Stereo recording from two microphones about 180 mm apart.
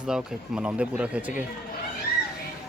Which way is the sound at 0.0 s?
5° right (ahead or behind).